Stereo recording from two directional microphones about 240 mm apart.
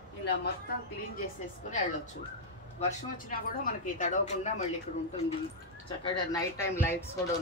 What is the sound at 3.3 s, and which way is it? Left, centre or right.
A woman's voice, left.